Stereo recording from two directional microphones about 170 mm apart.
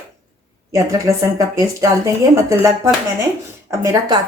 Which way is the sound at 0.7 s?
20° right (ahead or behind).